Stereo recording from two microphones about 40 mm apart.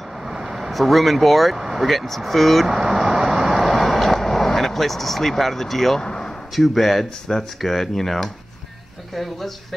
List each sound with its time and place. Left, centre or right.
0.3 s speech: centre
1.6 s vehicle: centre
1.9 s speech: centre
2.7 s vehicle: centre
5.9 s speech: centre
6.5 s speech: centre